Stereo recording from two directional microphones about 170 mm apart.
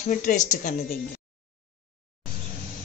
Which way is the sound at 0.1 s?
50° left (ahead or behind).